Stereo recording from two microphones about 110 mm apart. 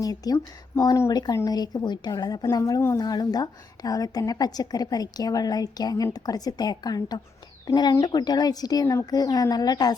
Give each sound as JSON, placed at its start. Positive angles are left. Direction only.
{"t": 0.0, "sound": "a woman's voice", "side_deg": 35}